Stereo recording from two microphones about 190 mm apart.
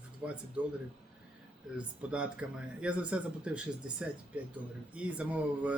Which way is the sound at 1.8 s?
5° right (ahead or behind).